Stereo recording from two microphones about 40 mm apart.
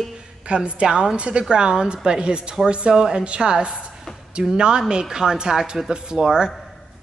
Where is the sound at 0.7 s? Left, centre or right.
Right.